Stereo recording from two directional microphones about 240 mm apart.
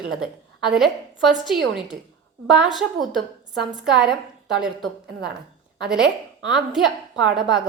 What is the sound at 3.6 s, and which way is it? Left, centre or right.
A woman's voice, centre.